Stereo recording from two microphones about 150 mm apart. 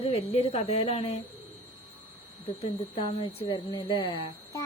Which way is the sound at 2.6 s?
35° left (ahead or behind).